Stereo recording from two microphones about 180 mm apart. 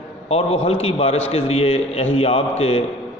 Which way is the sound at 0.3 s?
35° left (ahead or behind).